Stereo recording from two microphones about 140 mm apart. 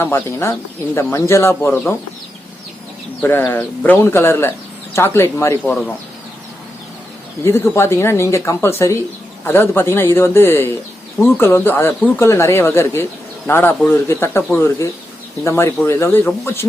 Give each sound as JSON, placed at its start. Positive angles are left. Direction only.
{"t": 0.0, "sound": "speech", "side_deg": 15}
{"t": 3.2, "sound": "speech", "side_deg": 15}
{"t": 7.4, "sound": "speech", "side_deg": 20}